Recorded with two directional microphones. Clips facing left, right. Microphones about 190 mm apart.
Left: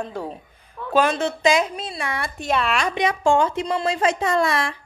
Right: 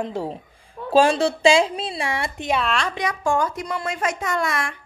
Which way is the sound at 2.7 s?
15° left (ahead or behind).